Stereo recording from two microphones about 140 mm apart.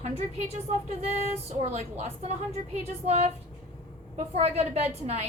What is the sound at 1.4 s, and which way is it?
A woman's voice, 50° right (ahead or behind).